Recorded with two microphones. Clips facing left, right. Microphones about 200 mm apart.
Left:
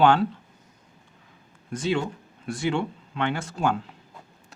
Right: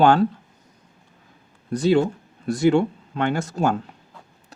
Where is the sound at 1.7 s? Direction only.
40° right (ahead or behind).